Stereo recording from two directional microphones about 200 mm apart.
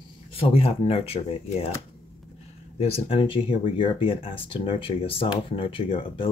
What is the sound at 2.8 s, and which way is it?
Speech, 30° left (ahead or behind).